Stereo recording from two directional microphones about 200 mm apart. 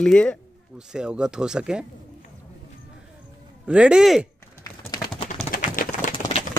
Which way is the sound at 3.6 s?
5° right (ahead or behind).